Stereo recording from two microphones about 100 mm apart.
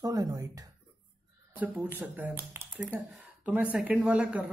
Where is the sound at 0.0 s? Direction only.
35° right (ahead or behind).